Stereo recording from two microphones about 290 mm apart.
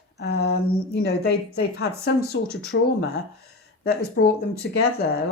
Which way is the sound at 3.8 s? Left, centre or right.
Left.